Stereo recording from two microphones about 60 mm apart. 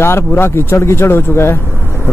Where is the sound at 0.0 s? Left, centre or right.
Left.